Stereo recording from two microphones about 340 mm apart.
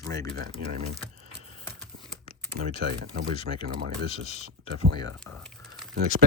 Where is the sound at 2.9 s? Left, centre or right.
Right.